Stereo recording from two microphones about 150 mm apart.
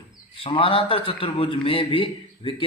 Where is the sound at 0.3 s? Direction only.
35° left (ahead or behind).